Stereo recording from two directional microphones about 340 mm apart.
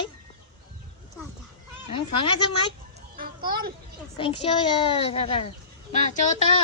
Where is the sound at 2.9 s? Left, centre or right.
Right.